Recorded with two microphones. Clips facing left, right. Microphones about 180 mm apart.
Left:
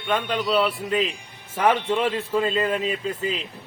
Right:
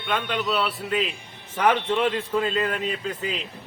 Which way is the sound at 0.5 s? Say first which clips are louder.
Left 4 dB; 35° left (ahead or behind).